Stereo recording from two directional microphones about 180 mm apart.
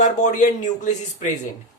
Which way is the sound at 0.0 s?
45° left (ahead or behind).